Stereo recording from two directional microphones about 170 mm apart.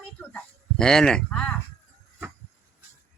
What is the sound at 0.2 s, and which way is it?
Speech, 5° left (ahead or behind).